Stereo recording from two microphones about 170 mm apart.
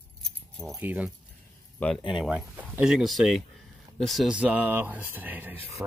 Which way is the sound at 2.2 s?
10° right (ahead or behind).